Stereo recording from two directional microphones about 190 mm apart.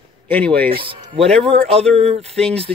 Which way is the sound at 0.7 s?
25° right (ahead or behind).